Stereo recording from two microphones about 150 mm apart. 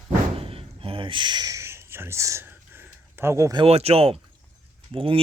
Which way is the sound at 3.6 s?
45° right (ahead or behind).